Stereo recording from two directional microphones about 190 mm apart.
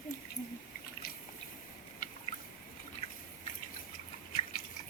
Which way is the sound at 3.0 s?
30° left (ahead or behind).